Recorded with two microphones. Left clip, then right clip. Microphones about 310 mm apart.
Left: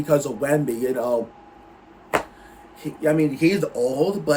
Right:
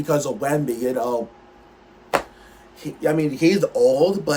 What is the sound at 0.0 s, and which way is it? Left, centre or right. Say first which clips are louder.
A man's voice: left 1 dB; centre.